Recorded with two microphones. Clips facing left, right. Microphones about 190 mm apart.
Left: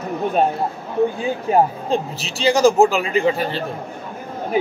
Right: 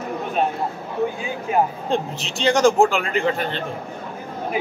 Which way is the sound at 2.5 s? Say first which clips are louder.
Left 2 dB; 5° left (ahead or behind).